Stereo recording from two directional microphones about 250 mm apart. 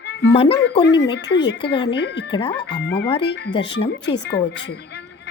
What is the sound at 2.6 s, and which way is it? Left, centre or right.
Speech, left.